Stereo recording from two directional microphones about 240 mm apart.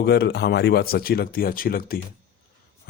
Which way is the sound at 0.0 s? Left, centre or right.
Left.